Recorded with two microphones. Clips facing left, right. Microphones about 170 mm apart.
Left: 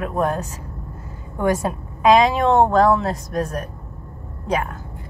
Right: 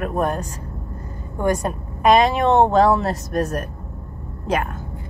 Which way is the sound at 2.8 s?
5° right (ahead or behind).